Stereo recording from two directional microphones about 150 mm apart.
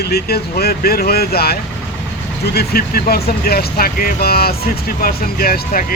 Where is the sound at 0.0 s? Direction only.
90° left.